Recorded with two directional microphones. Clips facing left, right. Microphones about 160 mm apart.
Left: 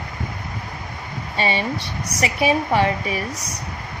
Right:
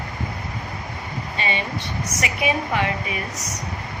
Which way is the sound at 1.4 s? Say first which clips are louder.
Left 5 dB; 35° left (ahead or behind).